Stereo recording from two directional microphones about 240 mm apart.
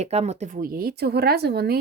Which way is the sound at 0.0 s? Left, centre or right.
Right.